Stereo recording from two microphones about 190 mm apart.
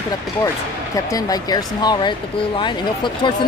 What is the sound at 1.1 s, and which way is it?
A woman's voice, 20° left (ahead or behind).